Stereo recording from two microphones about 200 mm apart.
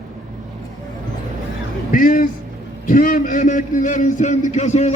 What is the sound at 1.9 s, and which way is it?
A man's voice, 45° left (ahead or behind).